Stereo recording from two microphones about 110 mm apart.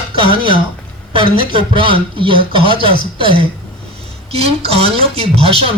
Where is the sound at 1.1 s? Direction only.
50° right (ahead or behind).